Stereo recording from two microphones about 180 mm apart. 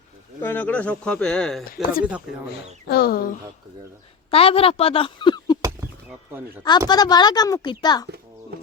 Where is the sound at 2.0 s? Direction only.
5° right (ahead or behind).